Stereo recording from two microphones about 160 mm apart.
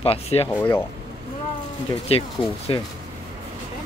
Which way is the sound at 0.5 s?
10° left (ahead or behind).